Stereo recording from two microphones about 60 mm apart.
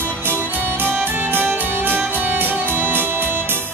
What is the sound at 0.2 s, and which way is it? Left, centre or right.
Music, right.